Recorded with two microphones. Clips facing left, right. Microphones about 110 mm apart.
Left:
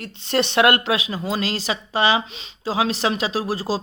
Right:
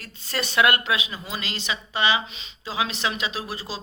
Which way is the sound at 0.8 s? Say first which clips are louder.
Left 5 dB; 30° left (ahead or behind).